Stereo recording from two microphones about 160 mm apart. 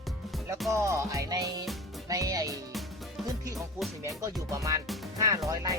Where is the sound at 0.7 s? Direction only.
20° right (ahead or behind).